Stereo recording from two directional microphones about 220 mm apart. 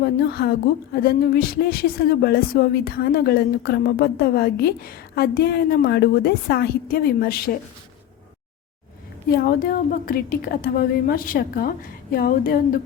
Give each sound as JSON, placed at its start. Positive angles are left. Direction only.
{"t": 0.0, "sound": "speech", "side_deg": 45}
{"t": 9.3, "sound": "a woman's voice", "side_deg": 45}